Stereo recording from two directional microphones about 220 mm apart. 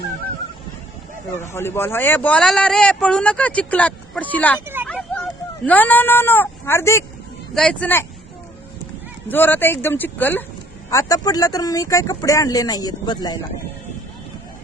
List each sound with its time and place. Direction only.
1.4 s speech: 10° left (ahead or behind)
4.6 s speech: 10° right (ahead or behind)
4.9 s a sound: 5° left (ahead or behind)
7.5 s speech: 5° left (ahead or behind)
9.3 s speech: 10° left (ahead or behind)